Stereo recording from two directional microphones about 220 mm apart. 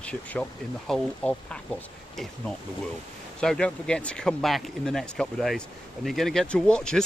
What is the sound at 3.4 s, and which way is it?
Speech, 5° left (ahead or behind).